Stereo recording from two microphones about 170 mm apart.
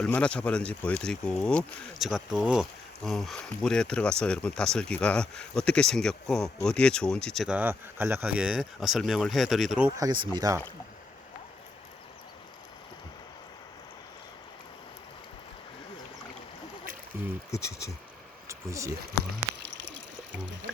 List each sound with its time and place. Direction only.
0.0 s speech: 5° left (ahead or behind)
7.4 s speech: 10° right (ahead or behind)
9.7 s speech: 10° right (ahead or behind)
17.2 s speech: 15° right (ahead or behind)
17.5 s speech: 20° left (ahead or behind)
18.4 s a sound: 20° right (ahead or behind)